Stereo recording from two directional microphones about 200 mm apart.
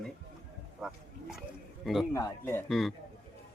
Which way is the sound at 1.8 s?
Centre (ahead or behind).